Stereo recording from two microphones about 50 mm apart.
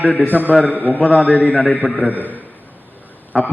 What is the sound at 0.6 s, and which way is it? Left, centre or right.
Speech, left.